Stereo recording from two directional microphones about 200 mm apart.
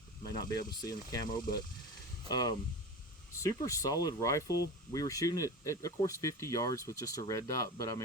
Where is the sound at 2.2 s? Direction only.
20° left (ahead or behind).